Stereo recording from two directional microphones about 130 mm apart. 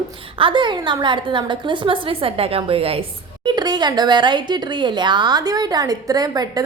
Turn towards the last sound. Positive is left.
turn(degrees=-30)  # may be behind; listen again after turning